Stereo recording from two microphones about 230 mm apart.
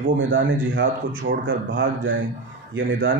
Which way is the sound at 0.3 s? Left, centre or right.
Right.